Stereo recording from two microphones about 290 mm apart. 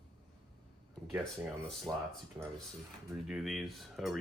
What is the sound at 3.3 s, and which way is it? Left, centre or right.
Speech, centre.